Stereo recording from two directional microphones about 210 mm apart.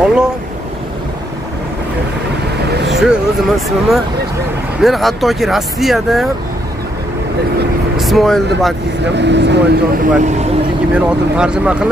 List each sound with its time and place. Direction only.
0.0 s speech: 5° right (ahead or behind)
2.7 s vehicle: 55° right (ahead or behind)
3.0 s speech: centre (ahead or behind)
8.0 s speech: centre (ahead or behind)
9.0 s speech: 55° right (ahead or behind)
10.2 s vehicle: 35° right (ahead or behind)
10.9 s speech: 5° right (ahead or behind)